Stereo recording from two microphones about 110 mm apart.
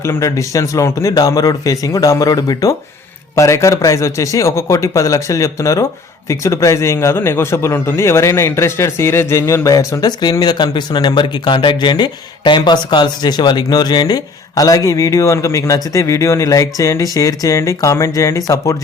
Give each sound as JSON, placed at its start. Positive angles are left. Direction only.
{"t": 0.0, "sound": "a man's voice", "side_deg": 25}